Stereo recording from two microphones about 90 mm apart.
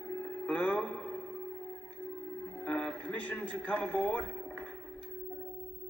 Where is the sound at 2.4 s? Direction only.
15° left (ahead or behind).